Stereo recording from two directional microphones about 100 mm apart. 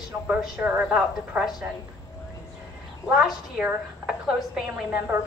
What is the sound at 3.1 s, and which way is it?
A woman's voice, 10° right (ahead or behind).